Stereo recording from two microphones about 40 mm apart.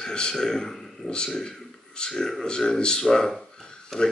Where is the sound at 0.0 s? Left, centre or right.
Centre.